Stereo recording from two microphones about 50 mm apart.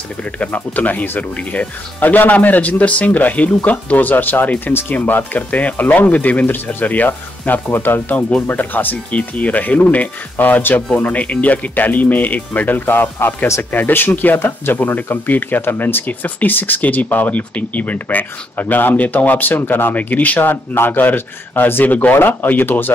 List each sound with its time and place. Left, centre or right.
0.2 s speech: left
21.8 s speech: left
22.1 s speech: left